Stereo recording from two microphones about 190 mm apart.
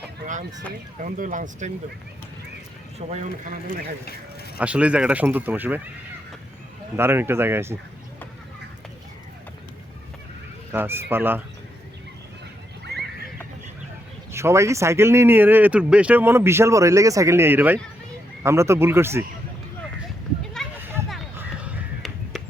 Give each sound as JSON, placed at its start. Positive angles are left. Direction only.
{"t": 1.0, "sound": "speech", "side_deg": -40}
{"t": 3.0, "sound": "speech", "side_deg": -40}
{"t": 4.5, "sound": "speech", "side_deg": -5}
{"t": 6.9, "sound": "speech", "side_deg": -10}
{"t": 10.7, "sound": "speech", "side_deg": -10}
{"t": 14.3, "sound": "speech", "side_deg": -15}
{"t": 20.7, "sound": "a sound", "side_deg": -10}
{"t": 21.3, "sound": "crow", "side_deg": -10}